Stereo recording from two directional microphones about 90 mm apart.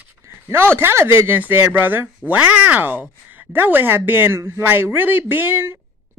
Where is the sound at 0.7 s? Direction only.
25° right (ahead or behind).